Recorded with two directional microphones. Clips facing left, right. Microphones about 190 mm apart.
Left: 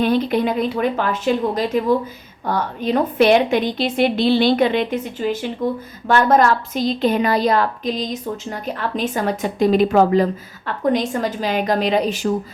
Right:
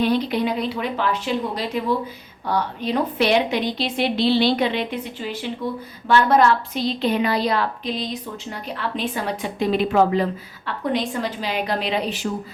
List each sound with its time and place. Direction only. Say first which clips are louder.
0.0 s a woman's voice: left 3 dB; 50° left (ahead or behind)